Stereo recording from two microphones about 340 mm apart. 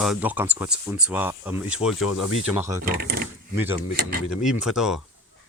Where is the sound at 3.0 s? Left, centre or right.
Right.